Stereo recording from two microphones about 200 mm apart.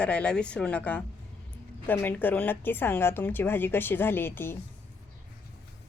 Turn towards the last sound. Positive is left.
turn(degrees=10)  # may be behind; listen again after turning